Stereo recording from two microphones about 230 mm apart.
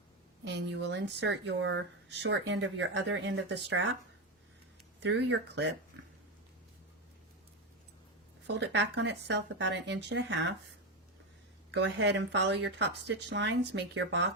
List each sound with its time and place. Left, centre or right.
0.4 s speech: right
5.0 s speech: right
8.5 s speech: right
11.7 s speech: right